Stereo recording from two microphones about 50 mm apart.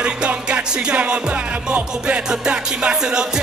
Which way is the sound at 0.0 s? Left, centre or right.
Right.